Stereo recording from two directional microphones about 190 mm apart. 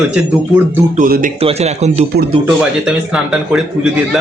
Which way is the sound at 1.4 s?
30° right (ahead or behind).